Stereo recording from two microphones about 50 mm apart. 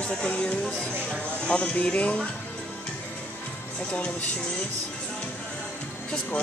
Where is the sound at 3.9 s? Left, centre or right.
Left.